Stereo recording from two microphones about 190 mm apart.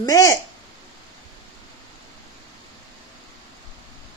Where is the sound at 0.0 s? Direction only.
15° left (ahead or behind).